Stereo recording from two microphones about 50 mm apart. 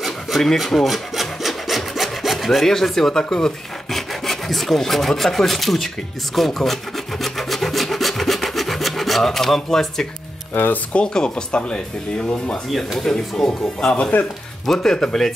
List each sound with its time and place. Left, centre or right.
0.0 s rub: centre
10.5 s speech: left
10.9 s speech: centre
12.7 s speech: centre
14.1 s speech: left
14.7 s speech: centre